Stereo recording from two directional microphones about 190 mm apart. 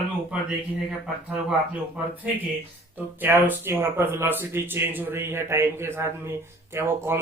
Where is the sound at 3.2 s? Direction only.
10° right (ahead or behind).